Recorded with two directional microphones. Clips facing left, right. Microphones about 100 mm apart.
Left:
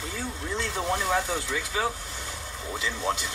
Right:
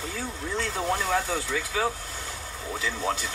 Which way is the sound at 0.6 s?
Centre (ahead or behind).